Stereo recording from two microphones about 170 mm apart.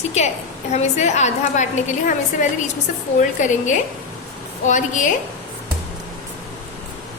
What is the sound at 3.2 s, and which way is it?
A woman's voice, 50° left (ahead or behind).